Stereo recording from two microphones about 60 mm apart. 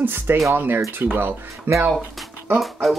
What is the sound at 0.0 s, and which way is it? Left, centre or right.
Speech, right.